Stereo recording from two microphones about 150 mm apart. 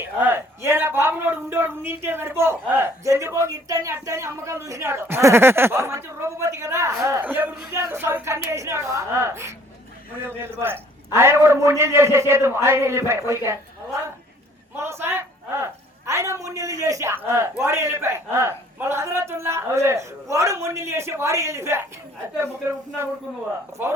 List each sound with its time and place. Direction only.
0.3 s a man's voice: 15° right (ahead or behind)
14.8 s a man's voice: 15° right (ahead or behind)